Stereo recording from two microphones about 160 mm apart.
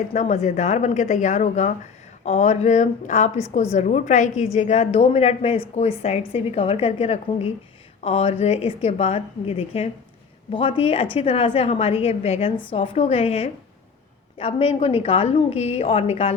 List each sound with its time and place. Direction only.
0.1 s a woman's voice: 45° left (ahead or behind)